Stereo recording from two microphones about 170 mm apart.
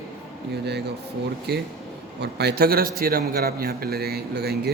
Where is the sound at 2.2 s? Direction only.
75° right (ahead or behind).